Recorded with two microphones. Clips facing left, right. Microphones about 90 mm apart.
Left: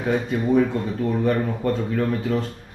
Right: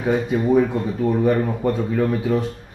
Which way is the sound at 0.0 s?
10° right (ahead or behind).